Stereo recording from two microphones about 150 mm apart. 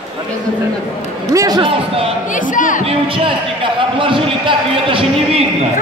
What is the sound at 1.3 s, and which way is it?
Speech, 25° right (ahead or behind).